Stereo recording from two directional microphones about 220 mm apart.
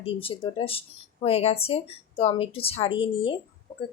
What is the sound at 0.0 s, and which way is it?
Speech, 25° left (ahead or behind).